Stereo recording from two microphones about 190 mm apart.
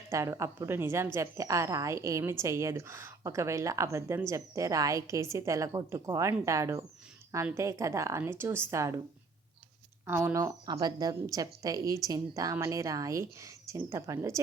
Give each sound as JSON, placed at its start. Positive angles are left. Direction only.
{"t": 0.1, "sound": "speech", "side_deg": -15}
{"t": 10.1, "sound": "speech", "side_deg": -10}